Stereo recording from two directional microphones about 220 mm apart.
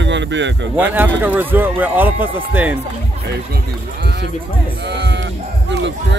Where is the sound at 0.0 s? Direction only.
55° right (ahead or behind).